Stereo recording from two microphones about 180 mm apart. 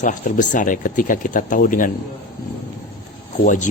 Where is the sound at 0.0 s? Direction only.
45° left (ahead or behind).